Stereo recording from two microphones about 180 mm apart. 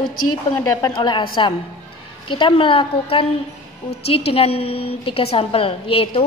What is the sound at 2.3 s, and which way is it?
Speech, 30° left (ahead or behind).